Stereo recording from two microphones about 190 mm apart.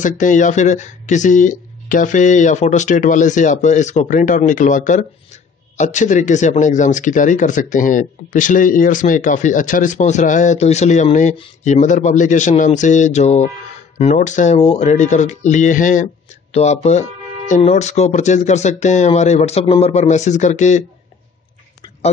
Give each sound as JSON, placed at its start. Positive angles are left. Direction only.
{"t": 0.0, "sound": "speech", "side_deg": 40}